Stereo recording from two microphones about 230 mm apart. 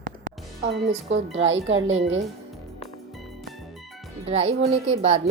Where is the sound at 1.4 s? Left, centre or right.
Right.